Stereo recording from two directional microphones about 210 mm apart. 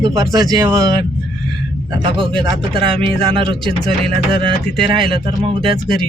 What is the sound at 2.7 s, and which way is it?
Speech, 25° right (ahead or behind).